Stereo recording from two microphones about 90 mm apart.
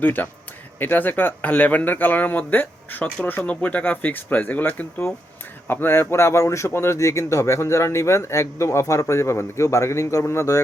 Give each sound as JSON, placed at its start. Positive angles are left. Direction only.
{"t": 0.0, "sound": "speech", "side_deg": 20}